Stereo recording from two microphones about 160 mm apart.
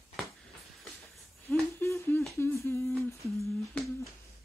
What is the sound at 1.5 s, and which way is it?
Humming, 15° left (ahead or behind).